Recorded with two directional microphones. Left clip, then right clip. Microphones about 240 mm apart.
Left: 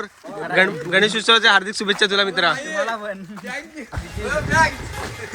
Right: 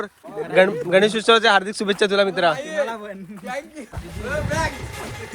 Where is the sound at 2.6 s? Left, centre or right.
Right.